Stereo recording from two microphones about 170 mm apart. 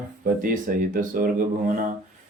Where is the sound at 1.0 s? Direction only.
55° right (ahead or behind).